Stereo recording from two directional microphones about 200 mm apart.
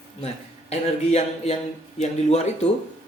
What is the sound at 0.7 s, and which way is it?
Speech, 30° left (ahead or behind).